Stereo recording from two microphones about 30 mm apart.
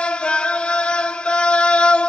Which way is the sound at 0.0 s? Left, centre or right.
Left.